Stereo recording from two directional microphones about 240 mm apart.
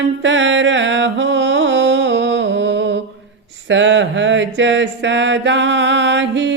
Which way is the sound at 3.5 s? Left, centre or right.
Right.